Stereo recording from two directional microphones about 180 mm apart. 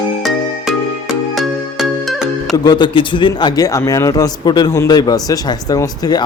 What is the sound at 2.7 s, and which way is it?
A man's voice, 25° left (ahead or behind).